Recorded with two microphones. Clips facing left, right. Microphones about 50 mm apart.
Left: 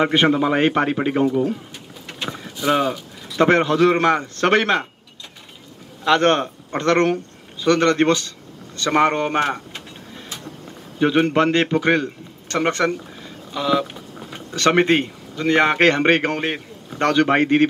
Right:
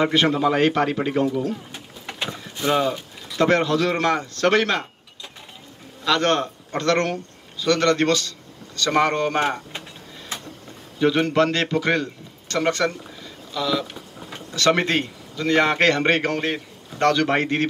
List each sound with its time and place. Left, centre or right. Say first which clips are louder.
0.0 s a man's voice: left 2 dB; left
2.6 s a man's voice: left 2 dB; left
6.0 s a man's voice: left 4 dB; left
11.0 s a man's voice: left 2 dB; left